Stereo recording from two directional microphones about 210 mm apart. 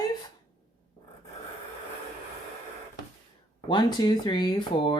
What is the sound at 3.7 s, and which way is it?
Speech, 20° left (ahead or behind).